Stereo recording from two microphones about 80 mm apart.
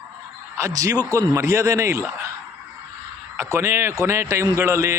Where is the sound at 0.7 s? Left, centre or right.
Right.